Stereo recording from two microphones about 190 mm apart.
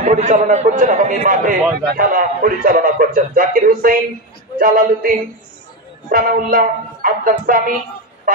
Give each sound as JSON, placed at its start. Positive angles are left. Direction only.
{"t": 0.0, "sound": "a man's voice", "side_deg": -40}